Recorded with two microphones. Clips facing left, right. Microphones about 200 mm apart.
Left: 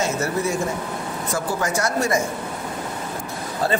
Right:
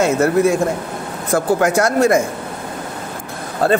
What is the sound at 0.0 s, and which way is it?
Speech, 55° right (ahead or behind).